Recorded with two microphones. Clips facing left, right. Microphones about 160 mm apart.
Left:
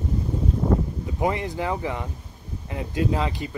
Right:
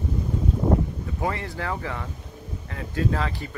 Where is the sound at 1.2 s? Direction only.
20° left (ahead or behind).